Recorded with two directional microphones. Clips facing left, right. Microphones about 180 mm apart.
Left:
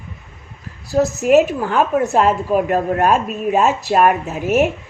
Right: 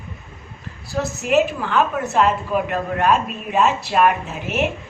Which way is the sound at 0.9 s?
45° left (ahead or behind).